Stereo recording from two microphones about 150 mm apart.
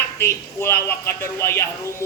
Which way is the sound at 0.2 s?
15° left (ahead or behind).